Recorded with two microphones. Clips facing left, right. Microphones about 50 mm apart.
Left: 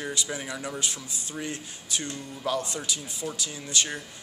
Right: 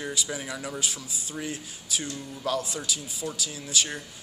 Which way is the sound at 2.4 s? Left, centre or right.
Centre.